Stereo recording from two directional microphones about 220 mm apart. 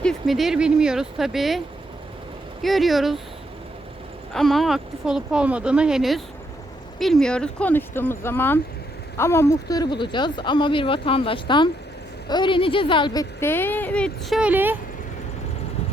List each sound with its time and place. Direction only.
0.0 s speech: centre (ahead or behind)
4.4 s speech: centre (ahead or behind)